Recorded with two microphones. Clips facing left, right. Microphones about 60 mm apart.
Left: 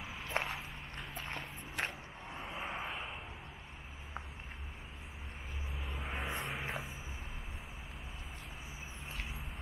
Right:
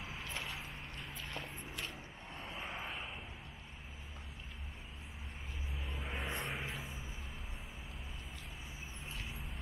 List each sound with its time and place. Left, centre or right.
0.2 s a sound: left
1.1 s walk: left
2.2 s vehicle: centre
5.9 s vehicle: centre